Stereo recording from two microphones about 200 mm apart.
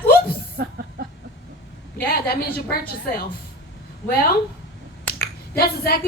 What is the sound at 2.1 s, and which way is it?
Speech, 50° left (ahead or behind).